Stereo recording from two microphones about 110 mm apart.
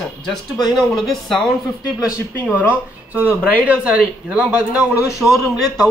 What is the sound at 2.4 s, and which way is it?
Speech, 15° right (ahead or behind).